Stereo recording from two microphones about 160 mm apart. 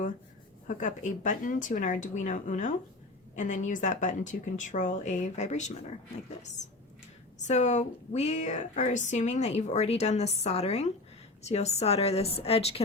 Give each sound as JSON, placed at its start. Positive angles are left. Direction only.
{"t": 0.8, "sound": "speech", "side_deg": 50}
{"t": 7.3, "sound": "a woman's voice", "side_deg": 45}